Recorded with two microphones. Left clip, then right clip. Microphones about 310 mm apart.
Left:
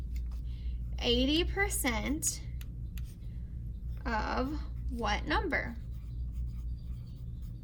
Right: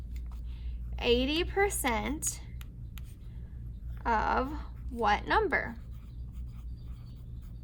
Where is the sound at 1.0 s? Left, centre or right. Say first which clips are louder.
Right 1 dB; centre.